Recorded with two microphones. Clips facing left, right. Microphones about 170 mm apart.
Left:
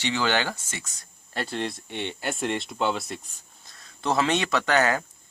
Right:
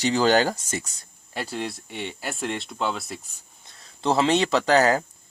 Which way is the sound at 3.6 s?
25° right (ahead or behind).